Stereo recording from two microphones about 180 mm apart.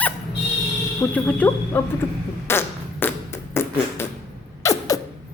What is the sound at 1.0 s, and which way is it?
Speech, 10° left (ahead or behind).